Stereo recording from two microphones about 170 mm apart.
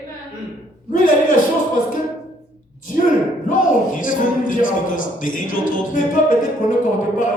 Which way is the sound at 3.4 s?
50° left (ahead or behind).